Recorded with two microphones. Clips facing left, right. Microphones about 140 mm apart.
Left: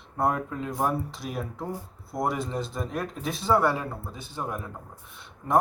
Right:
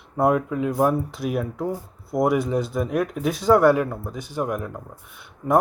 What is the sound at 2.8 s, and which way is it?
Speech, 15° right (ahead or behind).